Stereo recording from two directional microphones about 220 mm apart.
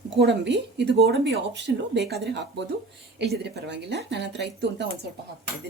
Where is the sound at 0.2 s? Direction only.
55° right (ahead or behind).